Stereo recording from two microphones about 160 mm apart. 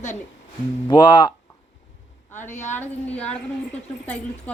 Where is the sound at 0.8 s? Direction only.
30° left (ahead or behind).